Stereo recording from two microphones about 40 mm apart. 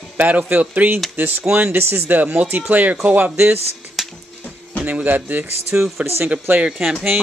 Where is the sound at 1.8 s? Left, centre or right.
Right.